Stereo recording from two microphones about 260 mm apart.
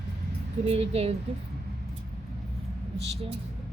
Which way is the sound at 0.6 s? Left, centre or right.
Right.